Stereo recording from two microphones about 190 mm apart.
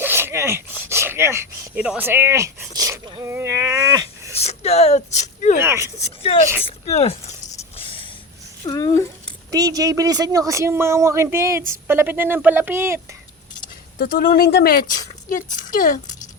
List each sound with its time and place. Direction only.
0.0 s speech: 10° right (ahead or behind)
4.4 s speech: 35° left (ahead or behind)
5.5 s speech: 15° right (ahead or behind)
6.0 s speech: 30° left (ahead or behind)
6.7 s a sound: 35° left (ahead or behind)
8.6 s speech: 20° left (ahead or behind)
9.5 s speech: 20° right (ahead or behind)
14.0 s speech: 50° left (ahead or behind)